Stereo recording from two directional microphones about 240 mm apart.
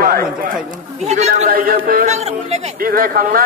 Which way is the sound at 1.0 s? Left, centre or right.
Right.